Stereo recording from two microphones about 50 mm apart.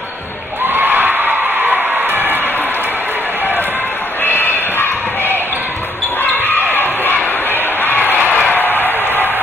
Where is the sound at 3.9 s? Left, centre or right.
Left.